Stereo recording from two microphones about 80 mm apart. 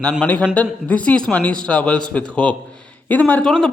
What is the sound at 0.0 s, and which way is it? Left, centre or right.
A man's voice, centre.